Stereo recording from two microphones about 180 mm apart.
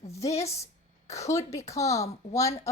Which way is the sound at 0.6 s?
15° left (ahead or behind).